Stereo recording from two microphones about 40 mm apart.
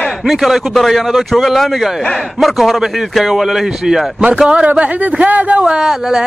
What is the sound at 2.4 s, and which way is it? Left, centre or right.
Music, centre.